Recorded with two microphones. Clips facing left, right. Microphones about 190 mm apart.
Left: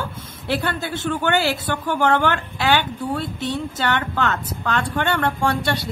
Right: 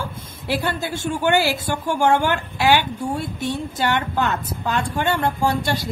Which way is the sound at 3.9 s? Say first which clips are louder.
Even; 15° right (ahead or behind).